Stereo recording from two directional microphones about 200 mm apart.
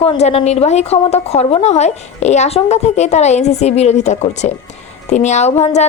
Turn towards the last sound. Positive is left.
turn(degrees=35)  # may be behind; listen again after turning